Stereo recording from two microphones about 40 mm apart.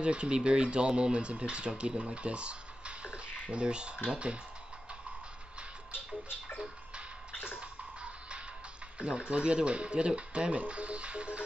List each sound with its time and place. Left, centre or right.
0.0 s speech: right
5.9 s music: left
7.4 s music: right
8.9 s speech: right